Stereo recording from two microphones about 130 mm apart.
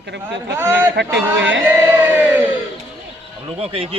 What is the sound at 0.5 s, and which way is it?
Speech, 15° right (ahead or behind).